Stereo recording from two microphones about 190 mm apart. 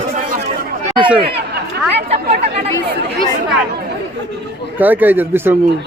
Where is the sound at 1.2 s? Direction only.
60° right (ahead or behind).